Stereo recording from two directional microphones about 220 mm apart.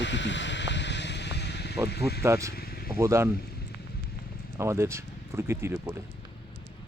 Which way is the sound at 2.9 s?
15° right (ahead or behind).